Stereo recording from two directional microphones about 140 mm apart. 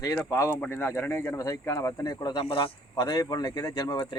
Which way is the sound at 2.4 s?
40° left (ahead or behind).